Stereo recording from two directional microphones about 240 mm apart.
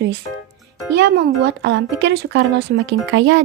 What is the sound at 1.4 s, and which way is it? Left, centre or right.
Speech, right.